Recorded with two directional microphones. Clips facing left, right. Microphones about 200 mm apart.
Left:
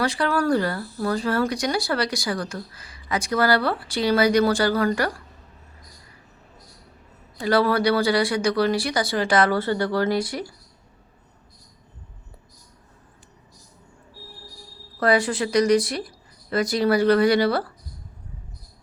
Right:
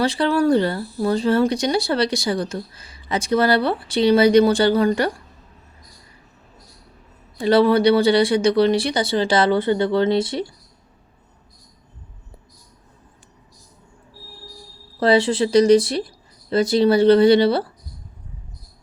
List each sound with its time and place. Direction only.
0.0 s speech: 25° right (ahead or behind)
7.3 s speech: 25° right (ahead or behind)
14.9 s speech: 25° right (ahead or behind)